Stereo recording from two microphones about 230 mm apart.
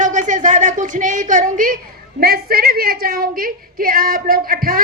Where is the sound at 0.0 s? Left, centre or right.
Right.